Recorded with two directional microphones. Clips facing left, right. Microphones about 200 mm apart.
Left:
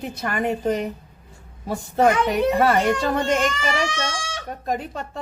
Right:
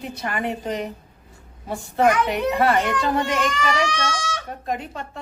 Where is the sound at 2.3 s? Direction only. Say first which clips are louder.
Left 2 dB; 45° left (ahead or behind).